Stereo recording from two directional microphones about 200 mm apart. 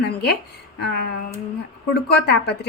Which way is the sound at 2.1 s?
55° left (ahead or behind).